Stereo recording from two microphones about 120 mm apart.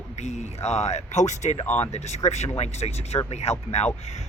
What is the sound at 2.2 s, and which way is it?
Speech, 65° left (ahead or behind).